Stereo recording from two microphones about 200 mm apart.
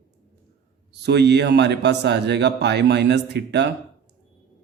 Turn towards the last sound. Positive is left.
turn(degrees=-60)  # may be behind; listen again after turning